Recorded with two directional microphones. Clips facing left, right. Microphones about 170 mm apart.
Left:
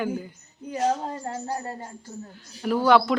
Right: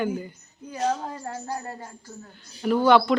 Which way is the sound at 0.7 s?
25° left (ahead or behind).